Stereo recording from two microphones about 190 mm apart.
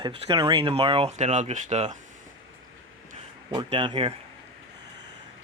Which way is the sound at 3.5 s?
25° right (ahead or behind).